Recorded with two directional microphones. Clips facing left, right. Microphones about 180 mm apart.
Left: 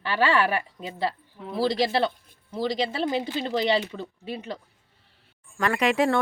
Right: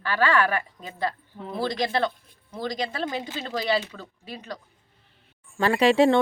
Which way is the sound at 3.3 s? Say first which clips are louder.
Left 1 dB; 20° left (ahead or behind).